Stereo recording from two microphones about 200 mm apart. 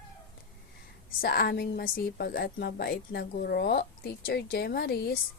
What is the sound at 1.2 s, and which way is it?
A woman's voice, 50° left (ahead or behind).